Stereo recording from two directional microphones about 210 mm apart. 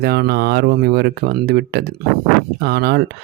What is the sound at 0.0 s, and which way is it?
Speech, 50° right (ahead or behind).